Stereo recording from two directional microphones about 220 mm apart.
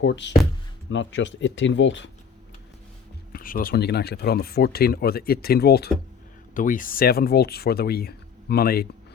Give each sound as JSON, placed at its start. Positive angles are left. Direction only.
{"t": 0.0, "sound": "speech", "side_deg": 55}
{"t": 3.3, "sound": "speech", "side_deg": 40}